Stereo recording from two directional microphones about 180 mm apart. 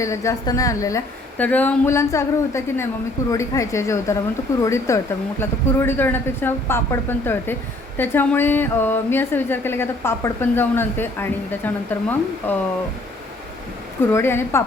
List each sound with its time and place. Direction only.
0.0 s a woman's voice: 15° left (ahead or behind)
14.1 s a woman's voice: 15° left (ahead or behind)